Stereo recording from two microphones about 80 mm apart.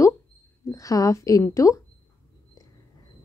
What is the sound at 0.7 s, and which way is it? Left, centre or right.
A woman's voice, left.